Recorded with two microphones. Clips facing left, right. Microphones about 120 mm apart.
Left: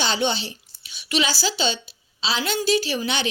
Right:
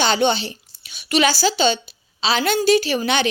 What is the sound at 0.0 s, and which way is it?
A woman's voice, 60° right (ahead or behind).